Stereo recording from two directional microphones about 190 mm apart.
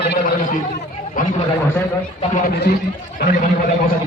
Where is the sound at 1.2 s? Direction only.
45° left (ahead or behind).